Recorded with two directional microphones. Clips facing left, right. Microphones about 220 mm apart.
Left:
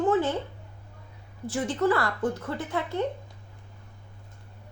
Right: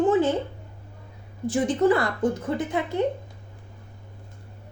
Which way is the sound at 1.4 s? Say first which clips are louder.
Right 5 dB; 15° right (ahead or behind).